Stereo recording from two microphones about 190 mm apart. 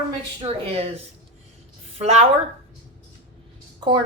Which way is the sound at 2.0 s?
35° right (ahead or behind).